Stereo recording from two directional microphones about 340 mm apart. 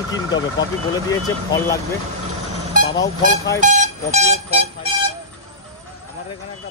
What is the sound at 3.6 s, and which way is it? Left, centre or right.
Speech, right.